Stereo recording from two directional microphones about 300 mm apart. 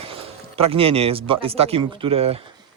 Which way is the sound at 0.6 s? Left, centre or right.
Centre.